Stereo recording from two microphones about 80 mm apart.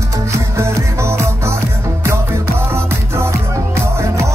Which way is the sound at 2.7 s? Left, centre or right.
Right.